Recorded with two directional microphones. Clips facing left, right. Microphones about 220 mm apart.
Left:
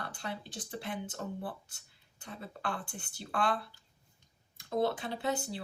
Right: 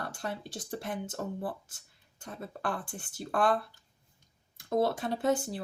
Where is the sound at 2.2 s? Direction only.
50° right (ahead or behind).